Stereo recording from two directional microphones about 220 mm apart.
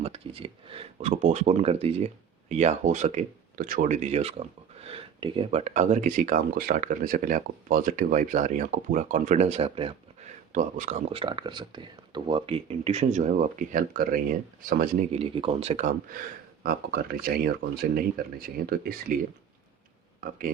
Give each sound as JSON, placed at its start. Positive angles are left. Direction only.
{"t": 0.0, "sound": "speech", "side_deg": -25}
{"t": 15.2, "sound": "speech", "side_deg": -25}
{"t": 16.6, "sound": "speech", "side_deg": -45}